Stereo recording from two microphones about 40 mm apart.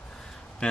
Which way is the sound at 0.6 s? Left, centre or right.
Left.